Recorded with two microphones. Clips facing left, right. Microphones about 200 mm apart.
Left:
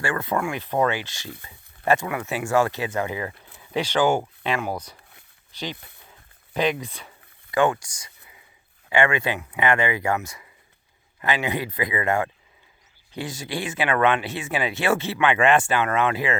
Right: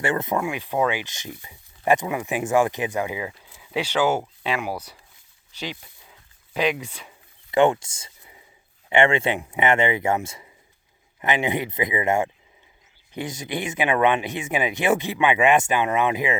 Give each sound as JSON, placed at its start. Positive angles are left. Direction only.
{"t": 0.0, "sound": "speech", "side_deg": -20}
{"t": 5.7, "sound": "speech", "side_deg": 60}
{"t": 6.5, "sound": "speech", "side_deg": -10}
{"t": 7.5, "sound": "speech", "side_deg": -25}